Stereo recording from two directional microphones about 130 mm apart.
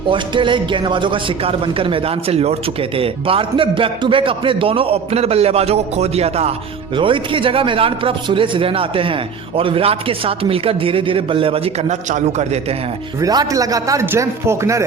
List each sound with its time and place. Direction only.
0.1 s a man's voice: 40° right (ahead or behind)
6.9 s a man's voice: 40° right (ahead or behind)
13.2 s a man's voice: 30° right (ahead or behind)